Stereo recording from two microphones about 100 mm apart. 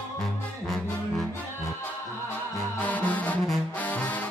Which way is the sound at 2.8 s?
15° left (ahead or behind).